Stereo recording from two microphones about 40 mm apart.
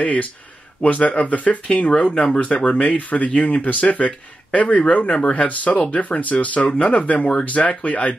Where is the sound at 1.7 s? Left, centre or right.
Left.